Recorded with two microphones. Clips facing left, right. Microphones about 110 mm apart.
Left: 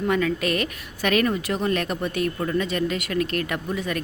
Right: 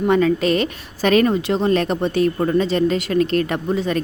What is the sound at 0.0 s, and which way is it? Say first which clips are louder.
A woman's voice: right 6 dB; 30° right (ahead or behind).